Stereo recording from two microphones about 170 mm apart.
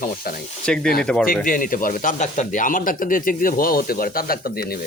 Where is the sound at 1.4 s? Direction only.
55° left (ahead or behind).